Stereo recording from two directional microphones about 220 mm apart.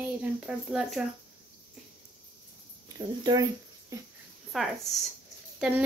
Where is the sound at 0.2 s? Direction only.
5° right (ahead or behind).